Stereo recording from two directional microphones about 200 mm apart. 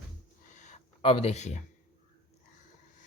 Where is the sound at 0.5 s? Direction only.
35° left (ahead or behind).